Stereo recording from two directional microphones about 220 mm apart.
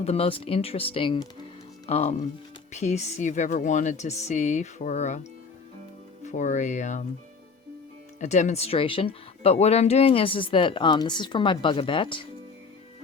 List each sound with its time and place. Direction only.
0.0 s speech: 25° left (ahead or behind)
6.2 s speech: 35° left (ahead or behind)
8.2 s speech: 30° left (ahead or behind)